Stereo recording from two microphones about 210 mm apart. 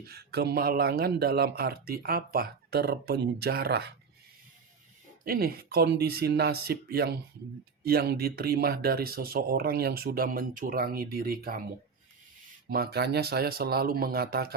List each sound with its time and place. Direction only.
0.0 s speech: 50° right (ahead or behind)
5.2 s speech: 45° right (ahead or behind)
12.6 s speech: 45° right (ahead or behind)